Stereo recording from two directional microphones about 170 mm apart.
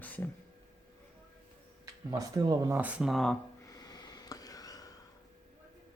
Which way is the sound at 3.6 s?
20° left (ahead or behind).